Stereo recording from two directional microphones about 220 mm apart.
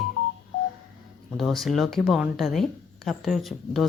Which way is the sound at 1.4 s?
Centre (ahead or behind).